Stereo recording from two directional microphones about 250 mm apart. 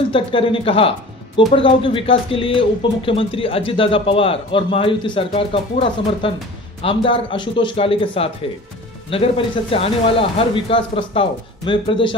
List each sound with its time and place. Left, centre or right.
0.1 s a man's voice: centre